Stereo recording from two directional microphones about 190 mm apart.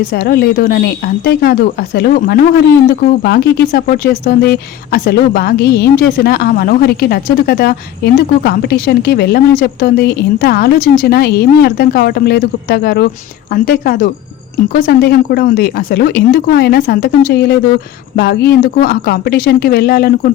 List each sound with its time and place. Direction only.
0.3 s speech: 55° left (ahead or behind)